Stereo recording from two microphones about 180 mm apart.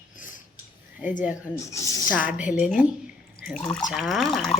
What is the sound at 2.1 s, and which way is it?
Speech, 50° left (ahead or behind).